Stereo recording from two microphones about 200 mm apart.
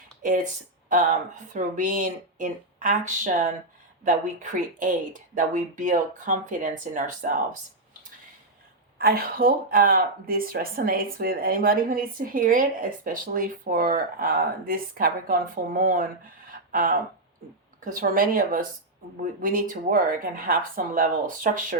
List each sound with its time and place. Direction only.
0.2 s speech: 40° right (ahead or behind)
1.5 s speech: 40° right (ahead or behind)
9.0 s speech: 50° right (ahead or behind)
16.5 s a sound: 45° right (ahead or behind)
17.7 s speech: 45° right (ahead or behind)